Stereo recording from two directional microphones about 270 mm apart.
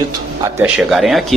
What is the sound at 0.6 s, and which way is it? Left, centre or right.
Speech, centre.